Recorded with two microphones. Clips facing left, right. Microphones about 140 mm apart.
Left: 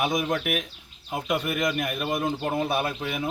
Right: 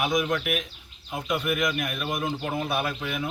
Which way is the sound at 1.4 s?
35° left (ahead or behind).